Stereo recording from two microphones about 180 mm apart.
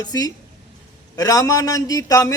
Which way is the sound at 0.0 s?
20° left (ahead or behind).